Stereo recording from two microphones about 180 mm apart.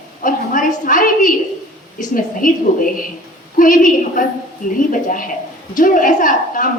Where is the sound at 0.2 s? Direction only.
50° left (ahead or behind).